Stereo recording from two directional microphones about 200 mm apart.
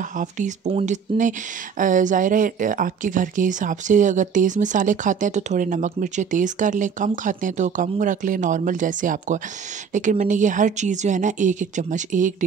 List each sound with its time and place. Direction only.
0.2 s speech: 35° right (ahead or behind)